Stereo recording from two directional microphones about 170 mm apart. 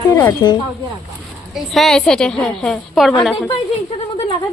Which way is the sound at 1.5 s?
Centre (ahead or behind).